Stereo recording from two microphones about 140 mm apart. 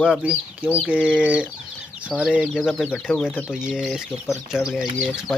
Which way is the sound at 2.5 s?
5° left (ahead or behind).